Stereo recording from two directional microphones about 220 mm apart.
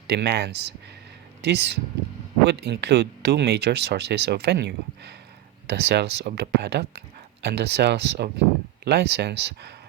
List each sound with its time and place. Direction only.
0.1 s speech: 50° right (ahead or behind)